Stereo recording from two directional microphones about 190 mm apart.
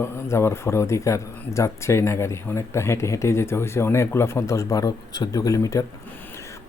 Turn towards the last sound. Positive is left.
turn(degrees=15)  # may be behind; listen again after turning